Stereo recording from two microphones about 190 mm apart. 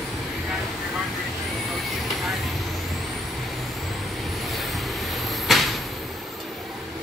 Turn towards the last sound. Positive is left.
turn(degrees=0)  # may be behind; listen again after turning